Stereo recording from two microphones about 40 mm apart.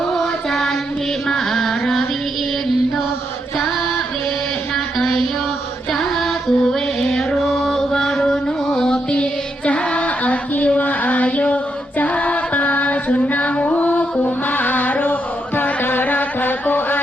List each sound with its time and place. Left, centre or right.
0.1 s music: centre
1.3 s carnatic music: centre
4.7 s a sound: centre
5.9 s female singing: centre
7.4 s chant: centre
8.3 s music: centre
10.8 s female singing: left
15.8 s music: left